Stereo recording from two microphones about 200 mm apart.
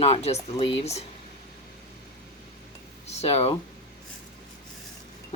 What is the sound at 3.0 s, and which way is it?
Speech, 30° left (ahead or behind).